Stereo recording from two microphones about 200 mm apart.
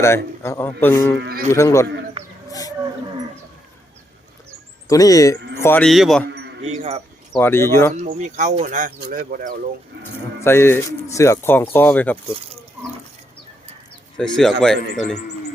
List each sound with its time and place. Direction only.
0.0 s speech: 15° left (ahead or behind)
2.5 s wild animals: 20° left (ahead or behind)
4.9 s a man's voice: 15° left (ahead or behind); by 6.2 s centre (ahead or behind)
6.7 s speech: 30° right (ahead or behind)
7.3 s speech: 10° left (ahead or behind)
8.0 s speech: 40° right (ahead or behind)
10.4 s speech: 10° left (ahead or behind)
14.2 s a man's voice: 5° left (ahead or behind)